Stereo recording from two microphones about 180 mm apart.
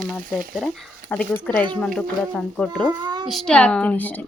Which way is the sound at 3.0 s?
25° right (ahead or behind).